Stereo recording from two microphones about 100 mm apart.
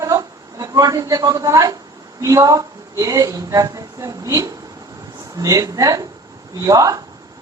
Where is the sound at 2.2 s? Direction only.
35° right (ahead or behind).